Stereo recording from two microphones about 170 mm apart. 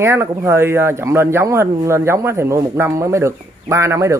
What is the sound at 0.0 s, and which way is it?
A man's voice, 15° right (ahead or behind).